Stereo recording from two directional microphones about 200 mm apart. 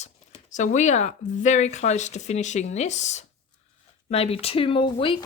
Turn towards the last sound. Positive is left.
turn(degrees=25)  # may be behind; listen again after turning